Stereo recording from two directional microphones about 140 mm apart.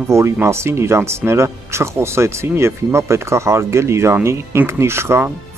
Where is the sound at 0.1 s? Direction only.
20° right (ahead or behind).